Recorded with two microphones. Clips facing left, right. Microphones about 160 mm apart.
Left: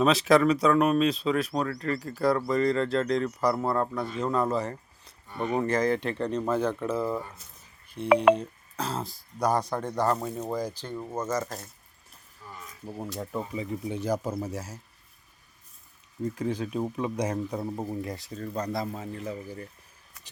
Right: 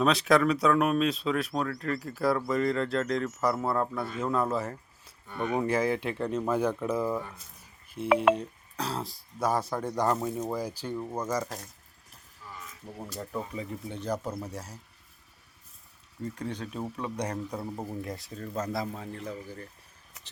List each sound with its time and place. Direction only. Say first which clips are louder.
0.0 s speech: left 3 dB; centre (ahead or behind)
10.9 s speech: even; centre (ahead or behind)
11.2 s speech: left 3 dB; 10° right (ahead or behind)
13.1 s speech: left 2 dB; 5° left (ahead or behind)
16.2 s speech: left 5 dB; 5° left (ahead or behind)